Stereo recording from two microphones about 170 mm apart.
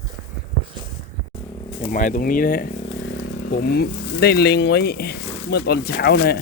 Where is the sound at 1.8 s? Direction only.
55° left (ahead or behind).